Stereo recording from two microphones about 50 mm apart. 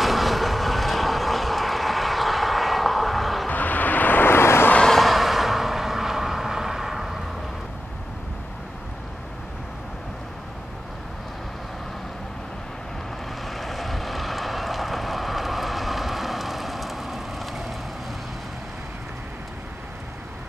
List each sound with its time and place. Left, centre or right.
0.0 s vehicle: centre
3.4 s vehicle: left
4.8 s vehicle: centre
13.4 s vehicle: centre